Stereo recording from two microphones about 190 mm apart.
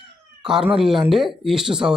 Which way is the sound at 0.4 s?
5° right (ahead or behind).